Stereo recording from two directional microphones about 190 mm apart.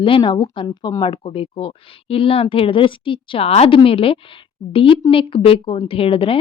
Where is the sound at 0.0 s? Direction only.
25° left (ahead or behind).